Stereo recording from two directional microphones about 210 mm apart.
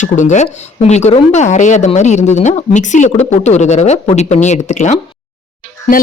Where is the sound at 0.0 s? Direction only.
35° left (ahead or behind).